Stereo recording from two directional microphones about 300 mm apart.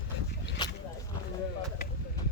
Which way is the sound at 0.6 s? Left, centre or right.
Centre.